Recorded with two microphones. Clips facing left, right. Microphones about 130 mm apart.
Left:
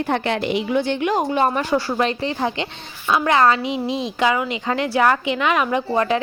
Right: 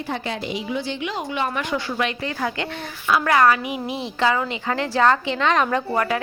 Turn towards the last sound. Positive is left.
turn(degrees=25)  # may be behind; listen again after turning